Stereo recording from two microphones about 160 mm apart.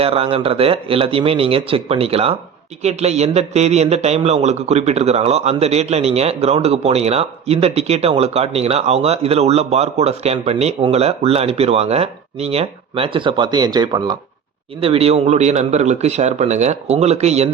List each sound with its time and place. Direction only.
0.0 s a man's voice: 40° right (ahead or behind)
14.8 s speech: 35° right (ahead or behind)